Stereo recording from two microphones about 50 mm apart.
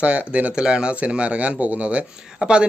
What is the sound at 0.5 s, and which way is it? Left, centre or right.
Speech, centre.